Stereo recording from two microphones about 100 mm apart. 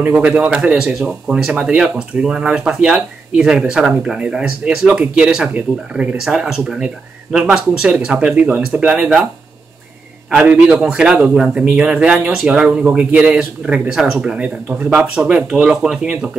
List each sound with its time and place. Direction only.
0.0 s speech: 15° right (ahead or behind)
0.6 s speech: 5° right (ahead or behind)
10.4 s speech: 15° right (ahead or behind)